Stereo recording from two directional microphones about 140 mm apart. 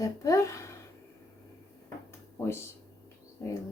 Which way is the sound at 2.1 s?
20° left (ahead or behind).